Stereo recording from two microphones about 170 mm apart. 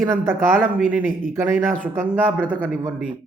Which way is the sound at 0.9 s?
10° right (ahead or behind).